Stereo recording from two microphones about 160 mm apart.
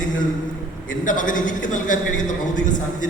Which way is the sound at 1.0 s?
55° left (ahead or behind).